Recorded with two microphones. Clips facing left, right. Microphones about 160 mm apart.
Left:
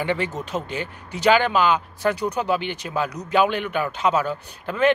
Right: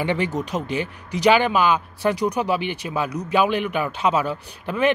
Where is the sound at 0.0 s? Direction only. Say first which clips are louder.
Right 2 dB; 15° right (ahead or behind).